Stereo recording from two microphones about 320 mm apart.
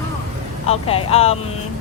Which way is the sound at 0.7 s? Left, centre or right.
Centre.